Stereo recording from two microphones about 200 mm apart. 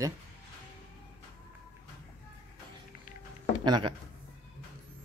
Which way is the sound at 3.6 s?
20° right (ahead or behind).